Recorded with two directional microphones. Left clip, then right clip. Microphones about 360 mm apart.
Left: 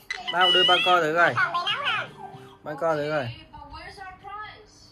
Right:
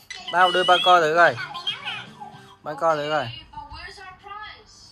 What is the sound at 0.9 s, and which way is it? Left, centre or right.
Speech, centre.